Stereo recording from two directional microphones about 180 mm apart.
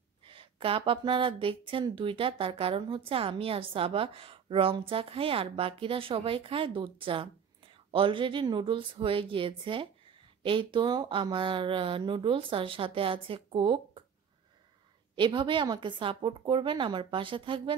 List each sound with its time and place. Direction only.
0.2 s a woman's voice: 30° right (ahead or behind)
15.1 s a woman's voice: 25° right (ahead or behind)